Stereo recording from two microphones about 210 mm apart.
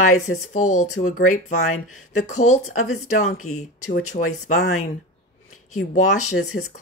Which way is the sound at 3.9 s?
35° left (ahead or behind).